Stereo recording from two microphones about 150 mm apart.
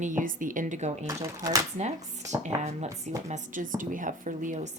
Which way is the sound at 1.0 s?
20° right (ahead or behind).